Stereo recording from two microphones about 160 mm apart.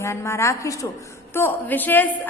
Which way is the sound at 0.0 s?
15° left (ahead or behind).